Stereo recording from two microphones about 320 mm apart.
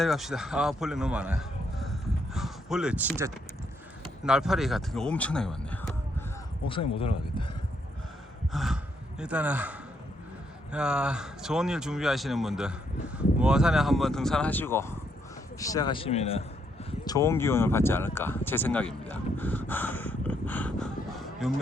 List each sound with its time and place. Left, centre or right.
0.0 s a man's voice: centre
4.3 s speech: centre
8.5 s speech: centre